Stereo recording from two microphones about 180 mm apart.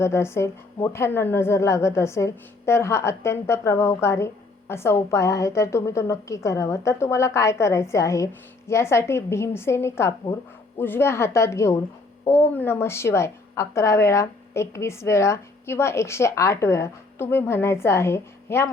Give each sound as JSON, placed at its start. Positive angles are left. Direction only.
{"t": 0.0, "sound": "a woman's voice", "side_deg": 15}